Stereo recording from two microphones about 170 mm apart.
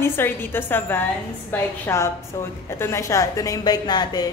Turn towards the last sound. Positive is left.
turn(degrees=25)  # may be behind; listen again after turning